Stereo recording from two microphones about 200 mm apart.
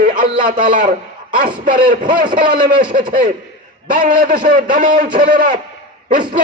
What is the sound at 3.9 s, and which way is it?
A man's voice, 40° right (ahead or behind).